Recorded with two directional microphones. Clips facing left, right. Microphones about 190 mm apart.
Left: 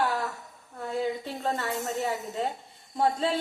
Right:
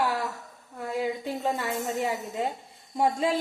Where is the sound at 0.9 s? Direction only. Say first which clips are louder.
Right 1 dB; 10° right (ahead or behind).